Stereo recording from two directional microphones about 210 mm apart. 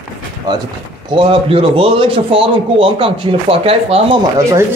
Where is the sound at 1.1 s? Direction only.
25° right (ahead or behind).